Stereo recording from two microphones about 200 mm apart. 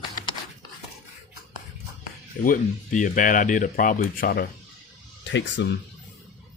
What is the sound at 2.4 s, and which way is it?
Speech, 40° left (ahead or behind).